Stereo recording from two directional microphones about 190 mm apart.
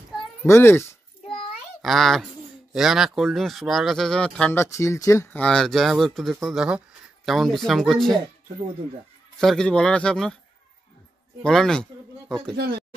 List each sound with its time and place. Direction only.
0.5 s speech: 15° left (ahead or behind)
1.8 s a child's voice: centre (ahead or behind)
9.4 s speech: 5° left (ahead or behind)
11.4 s speech: 5° left (ahead or behind)
12.5 s speech: 55° right (ahead or behind)